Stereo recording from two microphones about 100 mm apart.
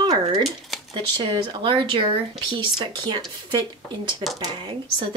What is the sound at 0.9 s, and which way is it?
A woman's voice, 50° right (ahead or behind).